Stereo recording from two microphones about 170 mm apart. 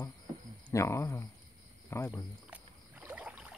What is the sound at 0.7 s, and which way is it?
Speech, 15° left (ahead or behind).